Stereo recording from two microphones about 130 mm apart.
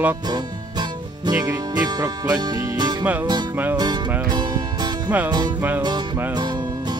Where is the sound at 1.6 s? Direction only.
30° right (ahead or behind).